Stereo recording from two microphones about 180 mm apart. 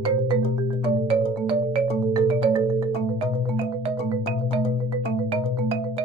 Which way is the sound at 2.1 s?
20° right (ahead or behind).